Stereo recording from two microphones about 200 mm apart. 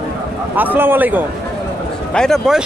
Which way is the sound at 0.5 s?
10° right (ahead or behind).